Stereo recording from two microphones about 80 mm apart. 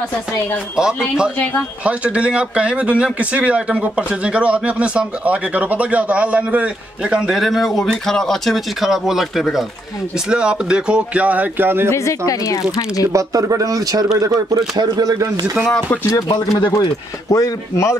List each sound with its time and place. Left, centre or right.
0.7 s speech: centre; by 11.9 s right
11.9 s speech: left
13.1 s a man's voice: right
14.8 s speech: right
16.5 s speech: left
17.3 s speech: left